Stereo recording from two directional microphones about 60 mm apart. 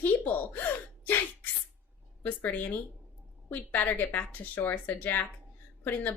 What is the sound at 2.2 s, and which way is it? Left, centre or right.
A woman's voice, left.